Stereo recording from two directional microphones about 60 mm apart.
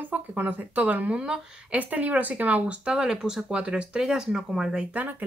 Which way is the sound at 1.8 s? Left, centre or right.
Right.